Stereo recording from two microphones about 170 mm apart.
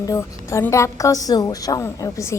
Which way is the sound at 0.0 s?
20° left (ahead or behind).